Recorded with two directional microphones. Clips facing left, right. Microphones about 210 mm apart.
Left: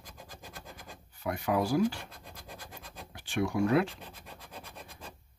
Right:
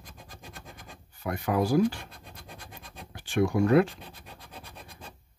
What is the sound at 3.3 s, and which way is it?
Speech, 50° right (ahead or behind).